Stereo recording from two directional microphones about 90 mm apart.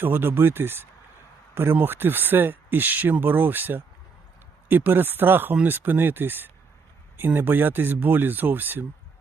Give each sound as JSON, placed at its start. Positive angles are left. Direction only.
{"t": 0.0, "sound": "speech", "side_deg": -25}